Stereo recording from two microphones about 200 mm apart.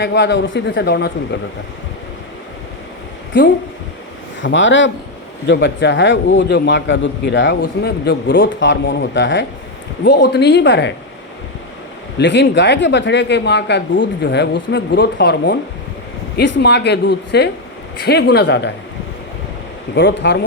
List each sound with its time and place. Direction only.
0.0 s speech: 60° left (ahead or behind)
4.4 s speech: 65° left (ahead or behind)
7.6 s speech: 55° left (ahead or behind)
12.2 s speech: 65° left (ahead or behind)
20.0 s speech: 60° left (ahead or behind)